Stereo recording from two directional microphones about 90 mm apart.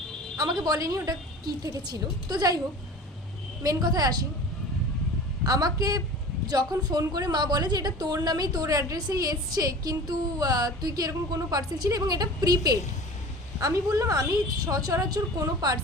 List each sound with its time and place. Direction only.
0.3 s a woman's voice: 45° right (ahead or behind)
3.6 s a woman's voice: 45° right (ahead or behind)
5.4 s a woman's voice: 45° right (ahead or behind)